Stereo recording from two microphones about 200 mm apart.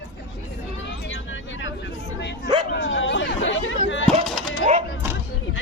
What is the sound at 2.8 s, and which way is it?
Chatter, 70° left (ahead or behind).